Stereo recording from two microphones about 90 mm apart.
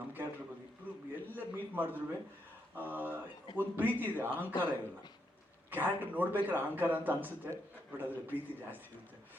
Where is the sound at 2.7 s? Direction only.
20° right (ahead or behind).